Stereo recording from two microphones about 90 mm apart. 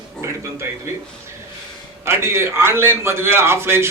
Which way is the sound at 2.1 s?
30° right (ahead or behind).